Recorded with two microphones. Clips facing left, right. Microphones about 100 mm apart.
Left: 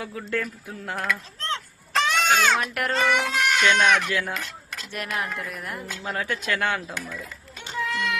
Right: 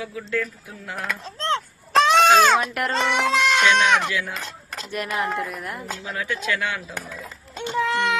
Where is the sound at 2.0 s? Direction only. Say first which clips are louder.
Right 6 dB; 75° right (ahead or behind).